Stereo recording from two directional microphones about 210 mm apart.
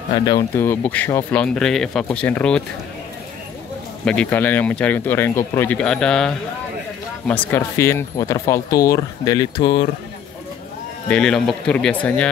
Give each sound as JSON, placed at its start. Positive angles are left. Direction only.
{"t": 0.1, "sound": "speech", "side_deg": 20}
{"t": 4.0, "sound": "speech", "side_deg": 5}
{"t": 11.1, "sound": "speech", "side_deg": 5}